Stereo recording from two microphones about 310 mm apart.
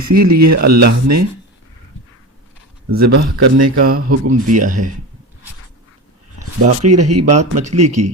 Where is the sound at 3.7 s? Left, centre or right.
Right.